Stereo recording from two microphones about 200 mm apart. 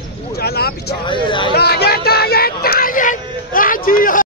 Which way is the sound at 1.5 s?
50° left (ahead or behind).